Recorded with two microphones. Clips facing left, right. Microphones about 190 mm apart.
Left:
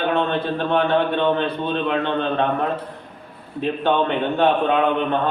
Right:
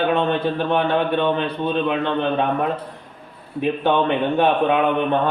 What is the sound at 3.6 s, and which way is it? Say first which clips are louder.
Speech: right 1 dB; 15° right (ahead or behind).